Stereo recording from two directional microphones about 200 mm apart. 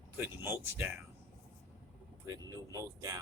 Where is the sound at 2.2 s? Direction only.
15° right (ahead or behind).